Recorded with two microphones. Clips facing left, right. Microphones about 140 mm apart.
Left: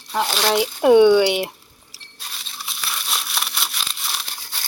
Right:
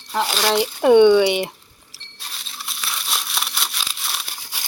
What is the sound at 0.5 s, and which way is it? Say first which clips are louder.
Speech: even; 5° left (ahead or behind).